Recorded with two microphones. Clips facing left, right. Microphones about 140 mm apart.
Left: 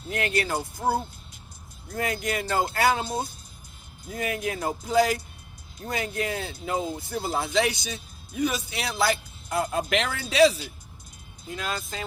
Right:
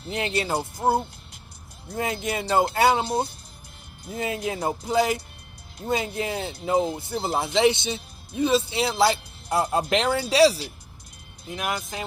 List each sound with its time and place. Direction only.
0.1 s speech: 25° right (ahead or behind)
11.4 s speech: 20° right (ahead or behind)